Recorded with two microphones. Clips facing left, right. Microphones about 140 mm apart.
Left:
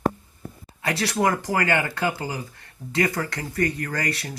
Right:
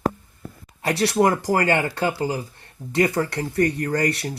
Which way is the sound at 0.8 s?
30° right (ahead or behind).